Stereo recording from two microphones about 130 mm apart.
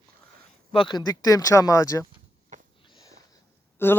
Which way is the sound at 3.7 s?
15° left (ahead or behind).